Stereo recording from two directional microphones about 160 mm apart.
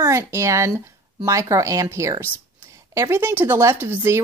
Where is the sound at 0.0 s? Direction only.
20° right (ahead or behind).